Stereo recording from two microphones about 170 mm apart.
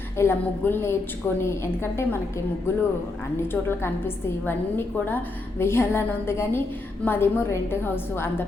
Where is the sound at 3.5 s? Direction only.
10° left (ahead or behind).